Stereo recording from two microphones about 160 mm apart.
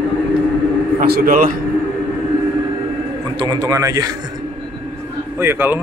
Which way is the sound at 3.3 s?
25° right (ahead or behind).